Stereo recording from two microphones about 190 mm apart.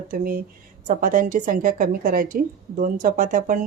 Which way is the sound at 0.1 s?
50° right (ahead or behind).